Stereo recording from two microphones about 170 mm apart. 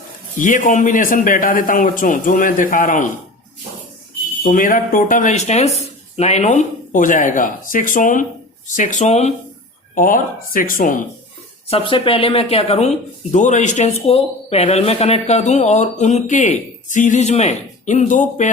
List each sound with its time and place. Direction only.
0.3 s speech: 50° left (ahead or behind)
4.4 s speech: 50° left (ahead or behind)
9.9 s speech: 50° left (ahead or behind)
11.7 s speech: 30° left (ahead or behind); by 18.5 s 45° left (ahead or behind)